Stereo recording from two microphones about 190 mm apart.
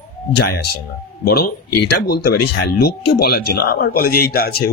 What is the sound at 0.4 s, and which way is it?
Speech, 60° left (ahead or behind).